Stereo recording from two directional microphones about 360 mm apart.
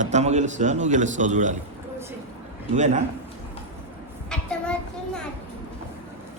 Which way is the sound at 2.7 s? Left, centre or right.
Centre.